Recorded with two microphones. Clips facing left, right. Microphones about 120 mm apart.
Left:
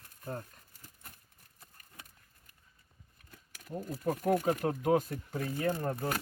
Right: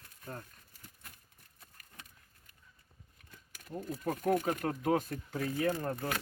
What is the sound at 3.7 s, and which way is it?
Speech, 10° left (ahead or behind).